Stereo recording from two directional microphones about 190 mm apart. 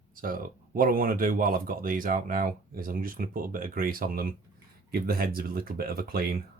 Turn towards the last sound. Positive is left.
turn(degrees=-50)  # may be behind; listen again after turning